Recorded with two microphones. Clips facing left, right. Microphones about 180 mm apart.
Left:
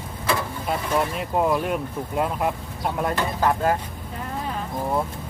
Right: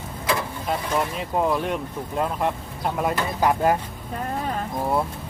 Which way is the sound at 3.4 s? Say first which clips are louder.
Right 2 dB; 15° right (ahead or behind).